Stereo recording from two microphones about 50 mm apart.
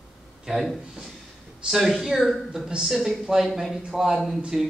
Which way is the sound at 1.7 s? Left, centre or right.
Centre.